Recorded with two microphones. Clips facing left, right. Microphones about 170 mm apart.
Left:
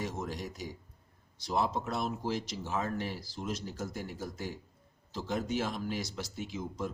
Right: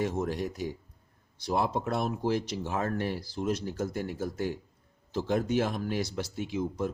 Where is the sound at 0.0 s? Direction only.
55° right (ahead or behind).